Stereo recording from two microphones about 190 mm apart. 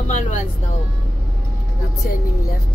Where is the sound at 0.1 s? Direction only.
40° left (ahead or behind).